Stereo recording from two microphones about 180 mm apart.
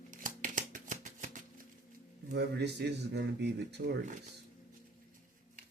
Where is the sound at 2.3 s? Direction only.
70° right (ahead or behind).